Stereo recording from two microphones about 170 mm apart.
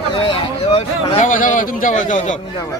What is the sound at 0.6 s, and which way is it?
A man's voice, 35° left (ahead or behind).